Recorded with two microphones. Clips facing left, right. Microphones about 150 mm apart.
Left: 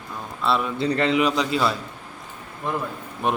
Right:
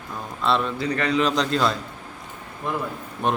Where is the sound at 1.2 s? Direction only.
5° left (ahead or behind).